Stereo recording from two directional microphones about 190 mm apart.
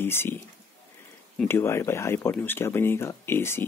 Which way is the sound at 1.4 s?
10° left (ahead or behind).